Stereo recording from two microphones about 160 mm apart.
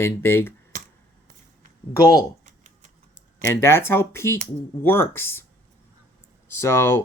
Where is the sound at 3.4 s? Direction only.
15° left (ahead or behind).